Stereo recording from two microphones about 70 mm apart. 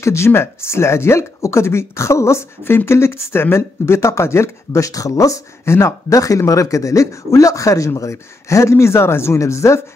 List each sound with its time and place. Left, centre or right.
0.0 s a man's voice: left